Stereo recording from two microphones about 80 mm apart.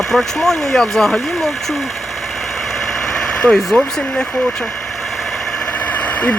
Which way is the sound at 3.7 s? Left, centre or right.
Left.